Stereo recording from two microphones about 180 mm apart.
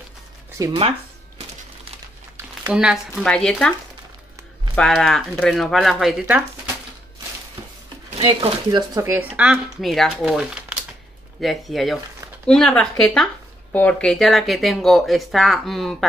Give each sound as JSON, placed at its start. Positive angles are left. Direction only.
{"t": 0.6, "sound": "speech", "side_deg": -20}
{"t": 2.3, "sound": "speech", "side_deg": -5}
{"t": 4.7, "sound": "speech", "side_deg": 5}
{"t": 8.6, "sound": "speech", "side_deg": -20}